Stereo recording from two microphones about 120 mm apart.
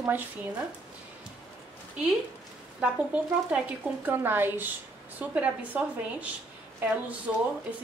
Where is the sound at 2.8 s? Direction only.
10° right (ahead or behind).